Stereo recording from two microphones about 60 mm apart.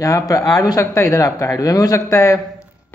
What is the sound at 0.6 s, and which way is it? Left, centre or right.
Speech, left.